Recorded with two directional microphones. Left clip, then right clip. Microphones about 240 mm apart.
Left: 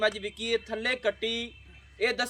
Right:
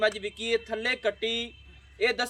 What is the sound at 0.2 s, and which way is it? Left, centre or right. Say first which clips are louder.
Speech: right 1 dB; centre.